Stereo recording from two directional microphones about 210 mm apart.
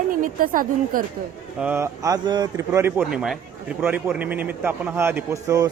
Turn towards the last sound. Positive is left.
turn(degrees=-15)  # may be behind; listen again after turning